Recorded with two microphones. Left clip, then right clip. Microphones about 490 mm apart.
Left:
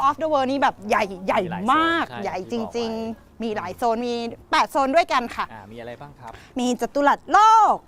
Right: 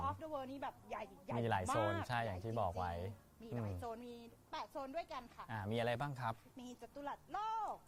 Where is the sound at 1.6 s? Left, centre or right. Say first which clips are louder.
Left 19 dB; left.